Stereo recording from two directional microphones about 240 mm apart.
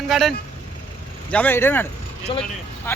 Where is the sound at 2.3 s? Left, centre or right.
Left.